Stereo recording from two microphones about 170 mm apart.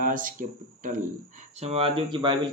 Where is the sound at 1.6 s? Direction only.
35° right (ahead or behind).